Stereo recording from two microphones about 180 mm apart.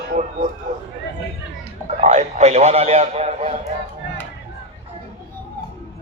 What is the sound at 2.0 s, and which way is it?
A man's voice, 40° right (ahead or behind).